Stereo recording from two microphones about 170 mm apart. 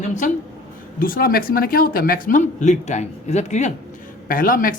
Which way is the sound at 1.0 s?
60° left (ahead or behind).